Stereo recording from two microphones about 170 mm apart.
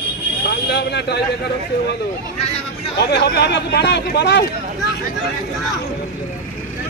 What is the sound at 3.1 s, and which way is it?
Speech, 75° left (ahead or behind).